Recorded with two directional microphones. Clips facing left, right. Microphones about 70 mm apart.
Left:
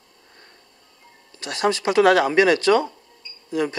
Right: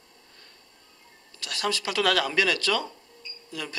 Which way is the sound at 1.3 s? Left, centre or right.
Left.